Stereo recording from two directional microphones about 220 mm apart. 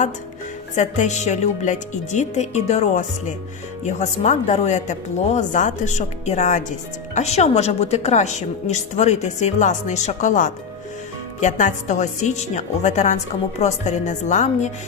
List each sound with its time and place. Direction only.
0.8 s speech: 35° left (ahead or behind)